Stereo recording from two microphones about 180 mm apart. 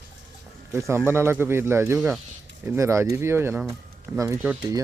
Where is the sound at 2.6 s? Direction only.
15° right (ahead or behind).